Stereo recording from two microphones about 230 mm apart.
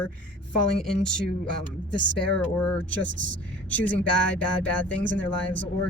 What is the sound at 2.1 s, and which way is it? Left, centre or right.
Speech, centre.